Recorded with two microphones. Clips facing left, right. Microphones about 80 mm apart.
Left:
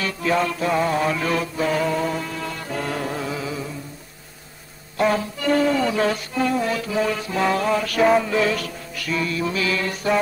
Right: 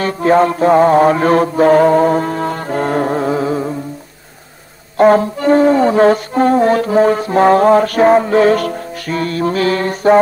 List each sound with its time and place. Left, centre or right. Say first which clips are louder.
0.0 s mantra: right 10 dB; right
4.9 s music: right 11 dB; right